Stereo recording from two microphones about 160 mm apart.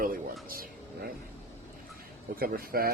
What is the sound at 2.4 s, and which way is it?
Speech, 65° right (ahead or behind).